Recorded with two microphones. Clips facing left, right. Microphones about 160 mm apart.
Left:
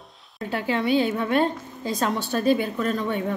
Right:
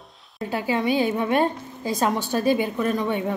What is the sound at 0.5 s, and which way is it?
A woman's voice, 10° right (ahead or behind).